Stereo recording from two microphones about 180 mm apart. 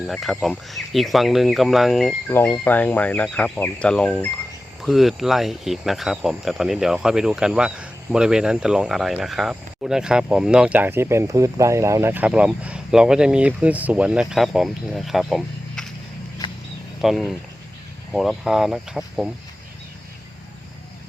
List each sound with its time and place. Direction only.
0.1 s speech: centre (ahead or behind)
2.3 s speech: 10° left (ahead or behind)
16.4 s wild animals: 25° left (ahead or behind)
17.0 s speech: centre (ahead or behind)